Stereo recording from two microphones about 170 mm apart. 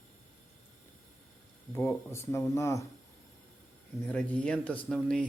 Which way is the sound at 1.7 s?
15° left (ahead or behind).